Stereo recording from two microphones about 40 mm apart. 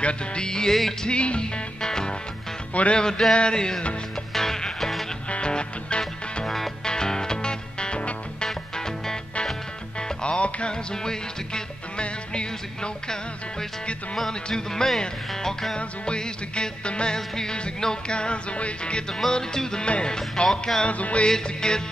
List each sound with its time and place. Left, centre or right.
0.0 s music: left
2.7 s music: left
3.0 s music: centre
5.3 s music: left
6.4 s music: centre
14.1 s music: centre; by 19.0 s left
19.1 s music: centre
20.9 s music: left
21.3 s music: centre